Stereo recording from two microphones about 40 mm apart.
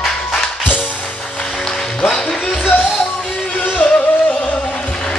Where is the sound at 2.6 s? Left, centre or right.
Left.